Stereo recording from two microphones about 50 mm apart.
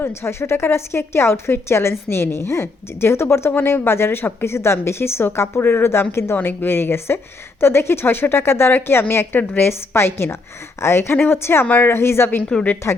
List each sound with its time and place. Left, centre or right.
0.0 s a woman's voice: left
6.3 s a woman's voice: left